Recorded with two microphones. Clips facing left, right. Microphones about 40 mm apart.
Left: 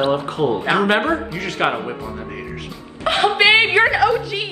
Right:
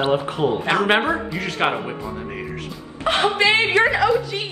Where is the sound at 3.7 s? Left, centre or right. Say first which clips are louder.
Left 2 dB; centre.